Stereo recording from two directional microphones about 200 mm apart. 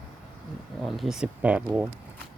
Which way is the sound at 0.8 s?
Centre (ahead or behind).